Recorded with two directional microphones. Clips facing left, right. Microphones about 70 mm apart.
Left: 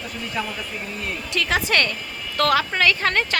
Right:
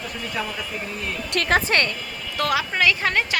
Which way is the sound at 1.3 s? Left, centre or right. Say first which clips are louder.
Right 3 dB; right.